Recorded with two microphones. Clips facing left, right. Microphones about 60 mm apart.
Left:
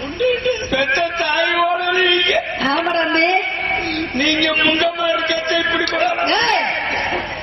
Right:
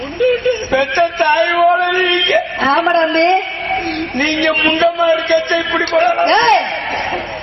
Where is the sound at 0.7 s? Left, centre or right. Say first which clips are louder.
Right 4 dB; right.